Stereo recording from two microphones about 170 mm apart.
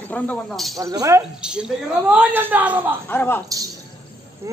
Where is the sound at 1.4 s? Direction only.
5° right (ahead or behind).